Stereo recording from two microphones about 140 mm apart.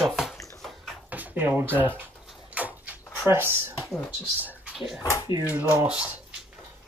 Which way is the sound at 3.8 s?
5° left (ahead or behind).